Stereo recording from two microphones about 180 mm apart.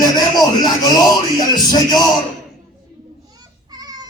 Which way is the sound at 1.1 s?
20° left (ahead or behind).